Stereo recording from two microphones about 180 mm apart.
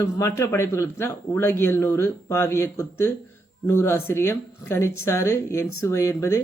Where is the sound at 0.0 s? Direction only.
15° left (ahead or behind).